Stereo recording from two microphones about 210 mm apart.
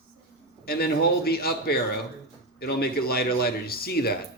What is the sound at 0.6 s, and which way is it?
Speech, 45° left (ahead or behind).